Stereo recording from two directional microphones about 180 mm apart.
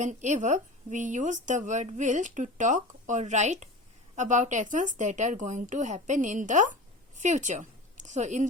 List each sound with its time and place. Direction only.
0.0 s a woman's voice: 40° right (ahead or behind)